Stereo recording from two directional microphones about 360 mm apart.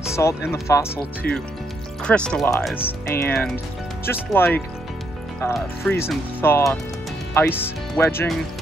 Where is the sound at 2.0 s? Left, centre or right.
Centre.